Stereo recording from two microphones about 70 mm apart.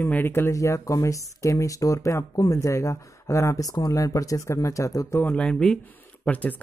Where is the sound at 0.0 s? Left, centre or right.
Left.